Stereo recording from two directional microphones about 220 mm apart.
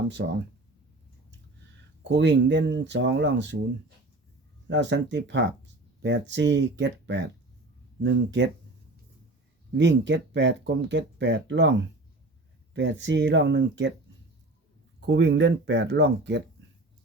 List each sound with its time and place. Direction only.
0.2 s speech: 50° right (ahead or behind)
2.0 s speech: 55° right (ahead or behind)
4.7 s speech: 55° right (ahead or behind)
9.7 s speech: 55° right (ahead or behind)
15.0 s speech: 50° right (ahead or behind)